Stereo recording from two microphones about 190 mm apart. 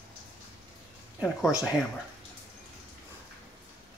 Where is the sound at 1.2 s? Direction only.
5° right (ahead or behind).